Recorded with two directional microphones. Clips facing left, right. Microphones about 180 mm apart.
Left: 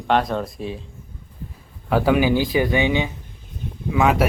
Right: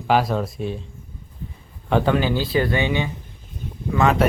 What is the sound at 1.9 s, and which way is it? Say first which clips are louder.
Speech: left 2 dB; 5° left (ahead or behind).